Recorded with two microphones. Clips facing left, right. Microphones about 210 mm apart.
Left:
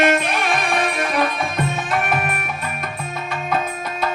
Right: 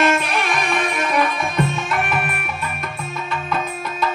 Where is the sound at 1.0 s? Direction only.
50° left (ahead or behind).